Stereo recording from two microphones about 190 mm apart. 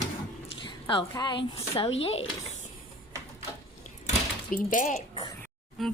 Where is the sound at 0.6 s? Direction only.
25° left (ahead or behind).